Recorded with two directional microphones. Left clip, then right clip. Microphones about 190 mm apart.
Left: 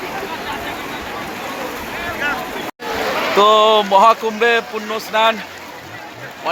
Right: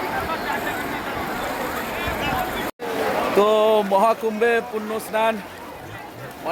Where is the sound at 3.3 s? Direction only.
Centre (ahead or behind).